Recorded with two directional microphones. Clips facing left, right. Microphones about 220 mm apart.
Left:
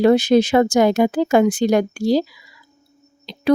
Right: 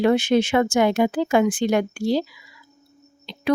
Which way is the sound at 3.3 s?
35° left (ahead or behind).